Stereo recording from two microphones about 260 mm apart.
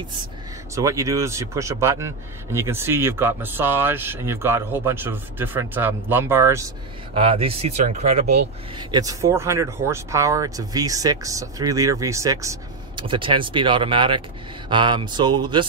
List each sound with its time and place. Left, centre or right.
0.7 s speech: centre
7.2 s speech: right
8.7 s speech: centre